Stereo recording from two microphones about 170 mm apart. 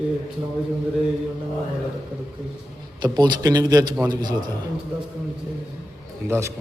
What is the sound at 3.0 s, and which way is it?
Speech, 25° right (ahead or behind).